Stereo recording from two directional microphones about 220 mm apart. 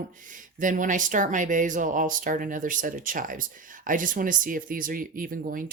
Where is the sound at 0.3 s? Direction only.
35° right (ahead or behind).